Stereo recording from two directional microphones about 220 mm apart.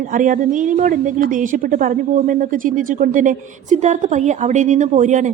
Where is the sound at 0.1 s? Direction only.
35° right (ahead or behind).